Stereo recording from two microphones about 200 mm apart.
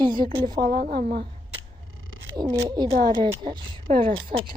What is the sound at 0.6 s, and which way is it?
Speech, 45° right (ahead or behind).